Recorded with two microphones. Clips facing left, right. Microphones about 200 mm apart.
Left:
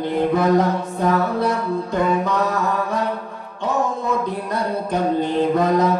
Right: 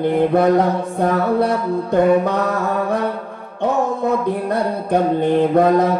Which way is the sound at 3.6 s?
60° right (ahead or behind).